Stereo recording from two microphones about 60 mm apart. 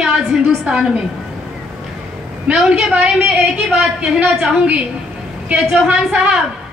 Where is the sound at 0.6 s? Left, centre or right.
Centre.